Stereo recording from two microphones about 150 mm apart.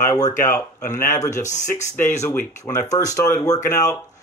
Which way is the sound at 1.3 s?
55° left (ahead or behind).